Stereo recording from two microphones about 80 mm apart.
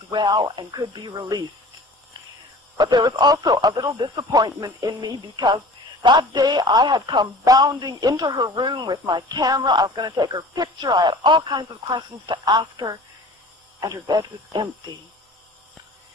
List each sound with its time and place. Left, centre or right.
0.1 s speech: right
2.8 s speech: right